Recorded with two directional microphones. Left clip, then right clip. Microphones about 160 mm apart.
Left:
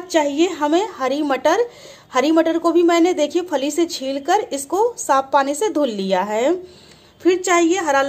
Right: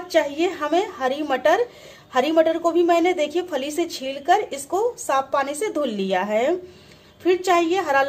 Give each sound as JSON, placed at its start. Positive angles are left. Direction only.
{"t": 0.1, "sound": "a woman's voice", "side_deg": 45}